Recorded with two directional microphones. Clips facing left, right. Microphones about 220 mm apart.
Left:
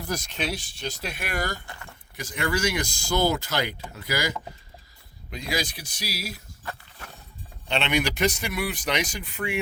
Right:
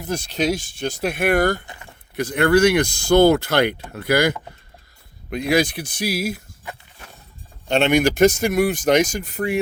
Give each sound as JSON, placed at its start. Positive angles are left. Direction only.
{"t": 0.0, "sound": "speech", "side_deg": -30}
{"t": 1.6, "sound": "a sound", "side_deg": -20}
{"t": 2.1, "sound": "speech", "side_deg": -60}
{"t": 7.7, "sound": "speech", "side_deg": -45}